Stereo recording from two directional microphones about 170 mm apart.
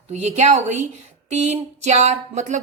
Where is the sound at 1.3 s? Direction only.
40° right (ahead or behind).